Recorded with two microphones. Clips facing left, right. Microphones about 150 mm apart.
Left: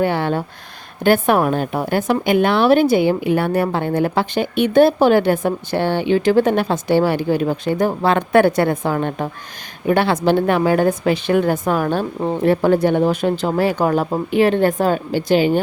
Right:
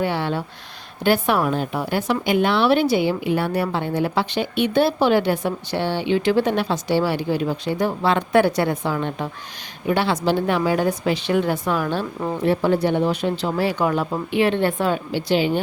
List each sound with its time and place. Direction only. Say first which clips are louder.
0.0 s a woman's voice: left 4 dB; 50° left (ahead or behind)